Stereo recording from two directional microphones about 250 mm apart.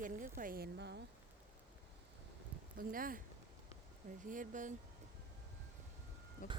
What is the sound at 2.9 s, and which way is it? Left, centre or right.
Speech, right.